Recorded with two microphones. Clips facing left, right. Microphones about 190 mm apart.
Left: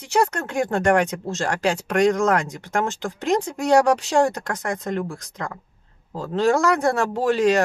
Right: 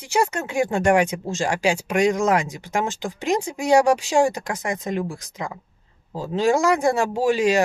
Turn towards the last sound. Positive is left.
turn(degrees=-10)  # may be behind; listen again after turning